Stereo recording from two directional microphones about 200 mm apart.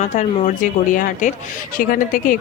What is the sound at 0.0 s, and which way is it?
A woman's voice, 35° left (ahead or behind).